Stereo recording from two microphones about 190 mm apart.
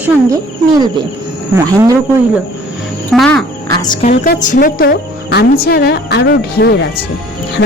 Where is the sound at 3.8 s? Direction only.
25° left (ahead or behind).